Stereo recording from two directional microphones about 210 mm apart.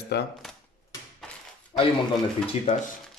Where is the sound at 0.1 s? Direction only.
50° left (ahead or behind).